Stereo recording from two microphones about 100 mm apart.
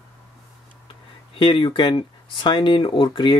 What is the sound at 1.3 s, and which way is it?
Speech, 60° left (ahead or behind).